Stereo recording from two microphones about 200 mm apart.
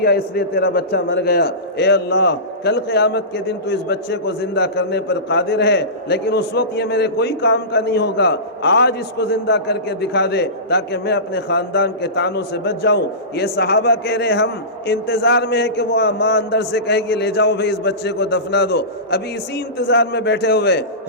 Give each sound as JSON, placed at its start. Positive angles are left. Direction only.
{"t": 0.0, "sound": "a man's voice", "side_deg": 50}